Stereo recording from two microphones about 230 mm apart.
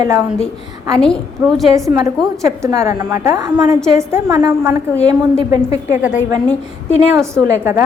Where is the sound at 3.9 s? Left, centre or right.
Centre.